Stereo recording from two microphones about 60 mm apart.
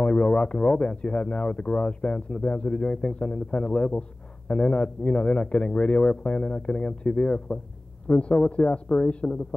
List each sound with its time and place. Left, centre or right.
0.0 s speech: centre